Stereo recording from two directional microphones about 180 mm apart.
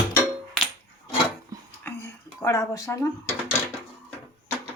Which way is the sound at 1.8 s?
15° left (ahead or behind).